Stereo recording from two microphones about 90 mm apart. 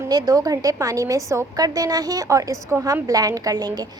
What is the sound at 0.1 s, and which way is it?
A woman's voice, 45° right (ahead or behind).